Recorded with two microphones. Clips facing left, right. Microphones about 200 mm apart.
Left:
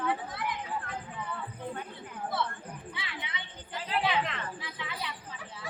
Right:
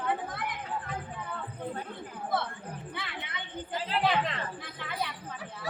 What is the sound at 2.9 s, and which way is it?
Speech, 55° right (ahead or behind).